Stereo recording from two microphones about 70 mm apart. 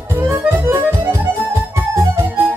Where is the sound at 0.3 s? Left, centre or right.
Right.